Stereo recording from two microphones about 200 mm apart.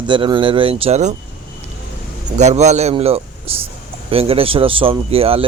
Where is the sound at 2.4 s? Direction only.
35° right (ahead or behind).